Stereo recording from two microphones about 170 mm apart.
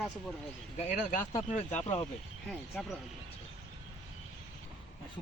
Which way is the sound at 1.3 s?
40° left (ahead or behind).